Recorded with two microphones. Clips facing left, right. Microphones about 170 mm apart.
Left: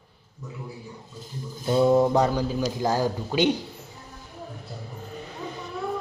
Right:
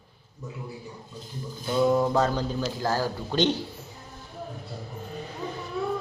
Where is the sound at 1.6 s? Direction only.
25° left (ahead or behind); by 3.6 s 10° left (ahead or behind).